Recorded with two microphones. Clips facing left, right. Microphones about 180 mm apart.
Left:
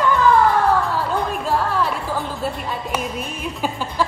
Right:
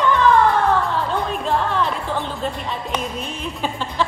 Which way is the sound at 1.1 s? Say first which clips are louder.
Even; 5° left (ahead or behind).